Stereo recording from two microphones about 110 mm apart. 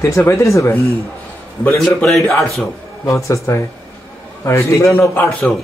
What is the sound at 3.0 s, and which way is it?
A man's voice, 30° left (ahead or behind).